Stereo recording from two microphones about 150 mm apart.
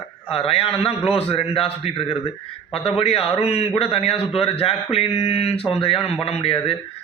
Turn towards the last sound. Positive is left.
turn(degrees=40)  # may be behind; listen again after turning